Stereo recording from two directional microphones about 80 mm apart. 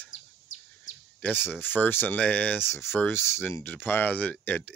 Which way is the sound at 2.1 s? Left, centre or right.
Centre.